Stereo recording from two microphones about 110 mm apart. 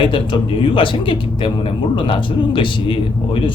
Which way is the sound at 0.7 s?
50° left (ahead or behind).